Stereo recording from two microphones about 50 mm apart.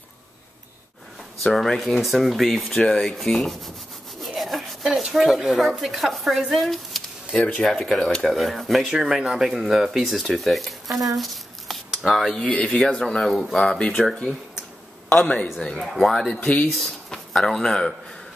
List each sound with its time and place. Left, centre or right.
1.4 s speech: centre
2.7 s speech: centre
4.4 s rub: centre
5.0 s speech: centre
12.4 s speech: left
12.7 s speech: centre
13.2 s speech: centre
13.6 s speech: centre
15.1 s speech: left
15.8 s speech: centre